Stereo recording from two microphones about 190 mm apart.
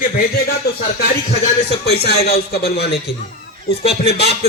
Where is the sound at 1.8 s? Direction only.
55° left (ahead or behind).